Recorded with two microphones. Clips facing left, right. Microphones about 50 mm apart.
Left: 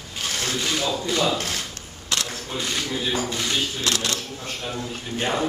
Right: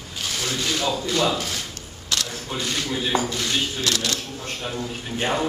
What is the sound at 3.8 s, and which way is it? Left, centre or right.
Speech, left.